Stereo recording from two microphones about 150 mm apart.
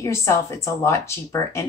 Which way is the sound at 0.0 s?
20° left (ahead or behind).